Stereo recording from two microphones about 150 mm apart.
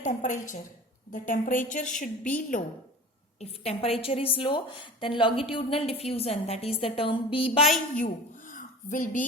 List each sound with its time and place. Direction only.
0.0 s a woman's voice: 55° left (ahead or behind)
3.4 s a woman's voice: 45° left (ahead or behind)
7.9 s a woman's voice: 60° left (ahead or behind)